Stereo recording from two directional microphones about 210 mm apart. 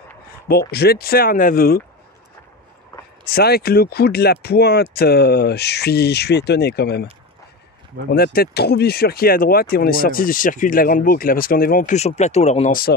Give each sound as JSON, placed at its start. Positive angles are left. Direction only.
{"t": 0.5, "sound": "speech", "side_deg": 45}
{"t": 3.3, "sound": "speech", "side_deg": 50}
{"t": 8.1, "sound": "speech", "side_deg": 45}